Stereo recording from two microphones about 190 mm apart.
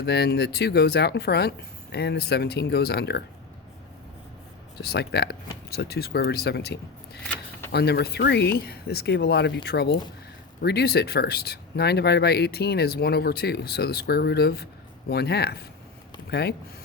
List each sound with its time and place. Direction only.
0.0 s speech: 60° left (ahead or behind)
4.8 s speech: 60° left (ahead or behind)
7.2 s a sound: 5° left (ahead or behind)
7.7 s speech: 60° left (ahead or behind)